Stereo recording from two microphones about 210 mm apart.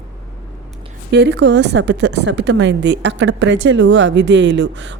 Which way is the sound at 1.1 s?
55° right (ahead or behind).